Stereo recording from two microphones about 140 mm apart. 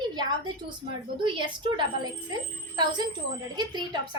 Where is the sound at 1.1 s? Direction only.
35° right (ahead or behind).